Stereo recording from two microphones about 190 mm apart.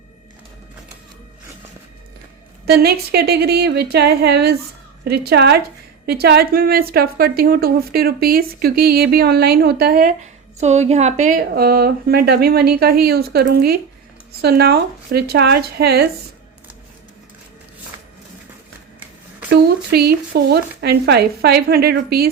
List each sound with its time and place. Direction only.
2.6 s a woman's voice: 55° right (ahead or behind)
10.6 s a woman's voice: 35° right (ahead or behind); by 16.0 s 55° right (ahead or behind)
19.5 s speech: 55° right (ahead or behind)